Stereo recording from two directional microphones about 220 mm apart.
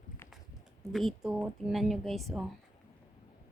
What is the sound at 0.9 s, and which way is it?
Speech, centre (ahead or behind).